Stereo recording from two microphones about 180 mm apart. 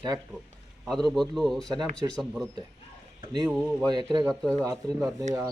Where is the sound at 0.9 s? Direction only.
Centre (ahead or behind).